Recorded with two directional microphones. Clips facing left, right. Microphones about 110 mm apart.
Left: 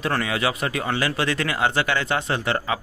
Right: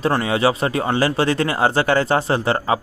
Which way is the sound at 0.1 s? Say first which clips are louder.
Right 6 dB; 30° right (ahead or behind).